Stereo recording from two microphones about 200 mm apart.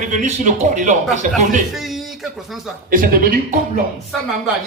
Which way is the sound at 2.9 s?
45° right (ahead or behind).